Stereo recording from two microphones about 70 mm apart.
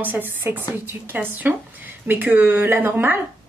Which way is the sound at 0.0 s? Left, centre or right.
Right.